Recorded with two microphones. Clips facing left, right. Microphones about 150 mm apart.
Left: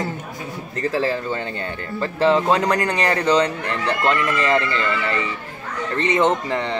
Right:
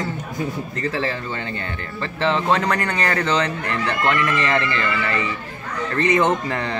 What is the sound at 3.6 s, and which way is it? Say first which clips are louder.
Speech: left 1 dB; 30° left (ahead or behind).